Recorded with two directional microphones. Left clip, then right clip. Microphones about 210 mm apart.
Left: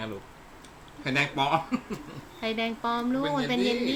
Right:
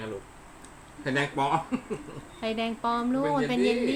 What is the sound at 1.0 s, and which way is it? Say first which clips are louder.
Speech: left 1 dB; 25° left (ahead or behind).